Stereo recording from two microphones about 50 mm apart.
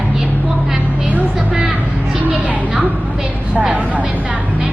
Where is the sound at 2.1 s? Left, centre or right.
Right.